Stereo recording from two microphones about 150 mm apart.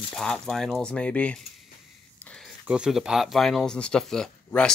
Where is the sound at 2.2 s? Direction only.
5° left (ahead or behind).